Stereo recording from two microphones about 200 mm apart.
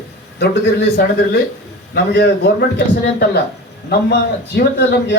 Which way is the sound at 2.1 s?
55° left (ahead or behind).